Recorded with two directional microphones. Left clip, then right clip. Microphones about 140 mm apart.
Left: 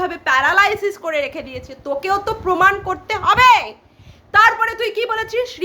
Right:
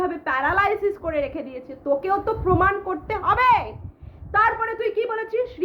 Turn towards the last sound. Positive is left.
turn(degrees=25)  # may be behind; listen again after turning